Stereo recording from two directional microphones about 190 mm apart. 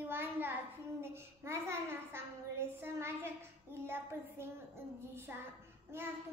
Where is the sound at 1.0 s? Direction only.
15° right (ahead or behind).